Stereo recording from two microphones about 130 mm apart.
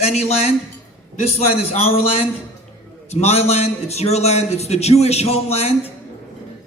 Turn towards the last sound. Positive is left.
turn(degrees=50)  # may be behind; listen again after turning